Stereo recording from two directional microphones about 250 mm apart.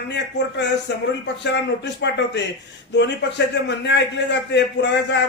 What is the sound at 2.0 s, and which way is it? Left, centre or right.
A man's voice, left.